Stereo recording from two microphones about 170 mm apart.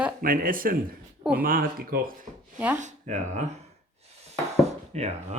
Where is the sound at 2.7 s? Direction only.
45° right (ahead or behind).